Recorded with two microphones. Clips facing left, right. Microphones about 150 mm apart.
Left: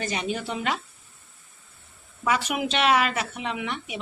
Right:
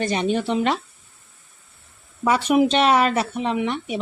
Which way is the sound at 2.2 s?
35° right (ahead or behind).